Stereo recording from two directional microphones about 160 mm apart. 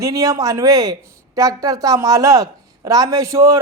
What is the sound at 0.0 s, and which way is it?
A woman's voice, 20° right (ahead or behind).